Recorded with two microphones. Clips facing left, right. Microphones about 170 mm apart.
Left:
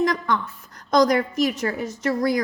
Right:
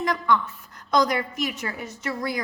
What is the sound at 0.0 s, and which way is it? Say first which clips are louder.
A woman's voice: left 1 dB; 40° left (ahead or behind).